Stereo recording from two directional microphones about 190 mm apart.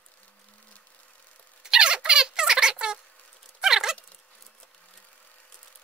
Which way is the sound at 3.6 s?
5° right (ahead or behind).